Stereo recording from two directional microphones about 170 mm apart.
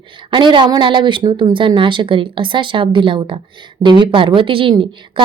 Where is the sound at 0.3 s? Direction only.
30° right (ahead or behind).